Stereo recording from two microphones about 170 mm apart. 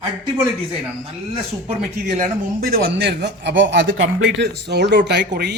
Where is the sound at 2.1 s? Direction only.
55° right (ahead or behind); by 3.9 s 90° right.